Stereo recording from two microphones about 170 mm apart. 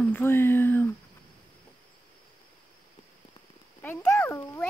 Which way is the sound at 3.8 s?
10° left (ahead or behind).